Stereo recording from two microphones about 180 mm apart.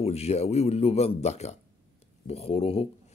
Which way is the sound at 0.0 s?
35° left (ahead or behind).